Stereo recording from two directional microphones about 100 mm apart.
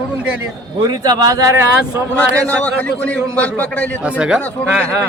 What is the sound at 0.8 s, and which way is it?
Speech, 45° right (ahead or behind).